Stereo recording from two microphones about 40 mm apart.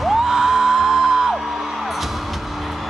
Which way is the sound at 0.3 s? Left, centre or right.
Centre.